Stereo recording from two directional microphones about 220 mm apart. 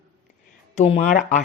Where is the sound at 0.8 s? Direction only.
30° left (ahead or behind).